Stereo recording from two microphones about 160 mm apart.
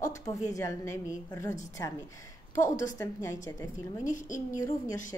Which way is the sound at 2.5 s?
50° left (ahead or behind).